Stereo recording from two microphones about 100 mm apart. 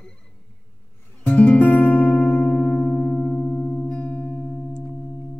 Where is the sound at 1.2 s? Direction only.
15° left (ahead or behind).